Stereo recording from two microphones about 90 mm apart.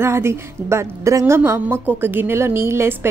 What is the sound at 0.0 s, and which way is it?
A woman's voice, 30° right (ahead or behind).